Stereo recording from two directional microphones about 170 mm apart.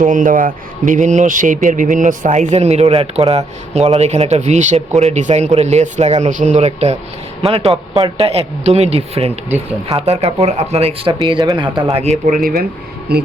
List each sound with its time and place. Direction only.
0.0 s a man's voice: 50° right (ahead or behind); by 12.1 s 35° right (ahead or behind)
13.1 s speech: 65° right (ahead or behind)